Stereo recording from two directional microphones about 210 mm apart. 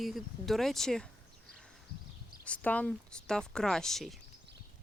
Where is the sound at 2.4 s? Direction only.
5° left (ahead or behind).